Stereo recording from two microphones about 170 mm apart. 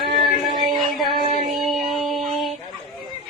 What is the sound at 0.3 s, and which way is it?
Music, 50° right (ahead or behind).